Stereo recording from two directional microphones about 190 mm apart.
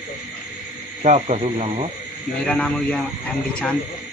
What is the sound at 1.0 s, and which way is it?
Speech, 35° right (ahead or behind).